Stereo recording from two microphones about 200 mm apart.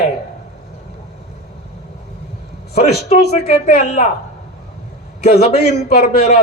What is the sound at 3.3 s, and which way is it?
Speech, 30° left (ahead or behind).